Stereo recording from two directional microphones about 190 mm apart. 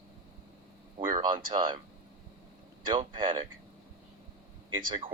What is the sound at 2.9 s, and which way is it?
Speech, 25° right (ahead or behind).